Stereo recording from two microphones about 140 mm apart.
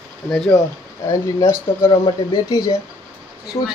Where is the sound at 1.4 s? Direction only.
25° left (ahead or behind).